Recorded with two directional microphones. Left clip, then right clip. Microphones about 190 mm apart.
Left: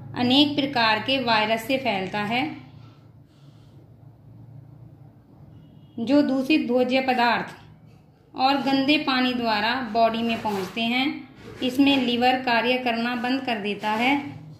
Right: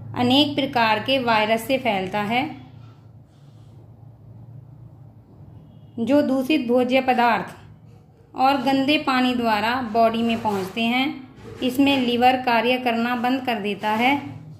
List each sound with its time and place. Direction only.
0.1 s a woman's voice: 15° right (ahead or behind)
5.9 s a woman's voice: 20° right (ahead or behind)